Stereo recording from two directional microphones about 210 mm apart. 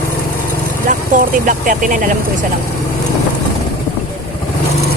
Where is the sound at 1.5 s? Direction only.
40° right (ahead or behind).